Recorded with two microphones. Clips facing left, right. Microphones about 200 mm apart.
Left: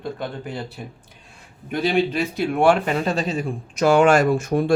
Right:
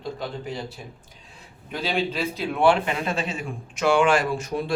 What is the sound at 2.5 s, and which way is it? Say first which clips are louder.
Speech: left 2 dB; 45° left (ahead or behind).